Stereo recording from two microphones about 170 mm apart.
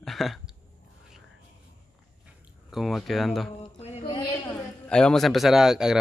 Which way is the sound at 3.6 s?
35° left (ahead or behind).